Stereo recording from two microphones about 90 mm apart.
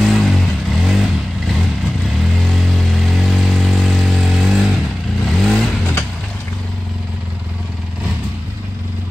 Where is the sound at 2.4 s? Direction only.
Centre (ahead or behind).